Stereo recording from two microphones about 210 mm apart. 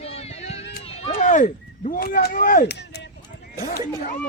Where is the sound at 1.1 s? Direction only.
35° left (ahead or behind).